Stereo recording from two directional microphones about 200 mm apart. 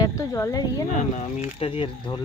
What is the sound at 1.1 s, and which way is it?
Speech, 35° left (ahead or behind).